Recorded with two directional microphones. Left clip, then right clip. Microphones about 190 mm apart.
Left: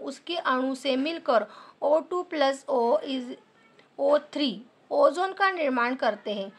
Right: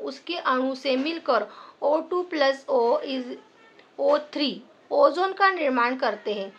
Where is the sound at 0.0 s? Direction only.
35° left (ahead or behind).